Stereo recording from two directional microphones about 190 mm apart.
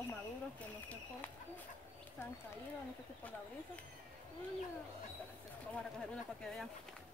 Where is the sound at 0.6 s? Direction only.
10° left (ahead or behind).